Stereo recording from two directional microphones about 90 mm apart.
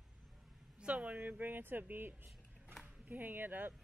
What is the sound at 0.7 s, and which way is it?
Speech, 15° right (ahead or behind).